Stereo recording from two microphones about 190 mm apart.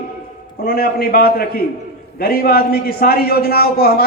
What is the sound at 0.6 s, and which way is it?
A man's voice, 55° left (ahead or behind).